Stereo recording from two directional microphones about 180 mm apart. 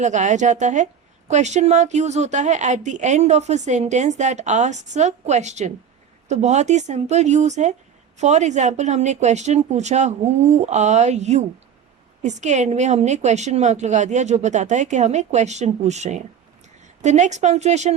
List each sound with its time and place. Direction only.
0.0 s a woman's voice: 40° right (ahead or behind)